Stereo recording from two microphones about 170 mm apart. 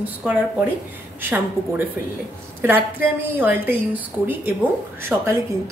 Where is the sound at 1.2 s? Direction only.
10° right (ahead or behind).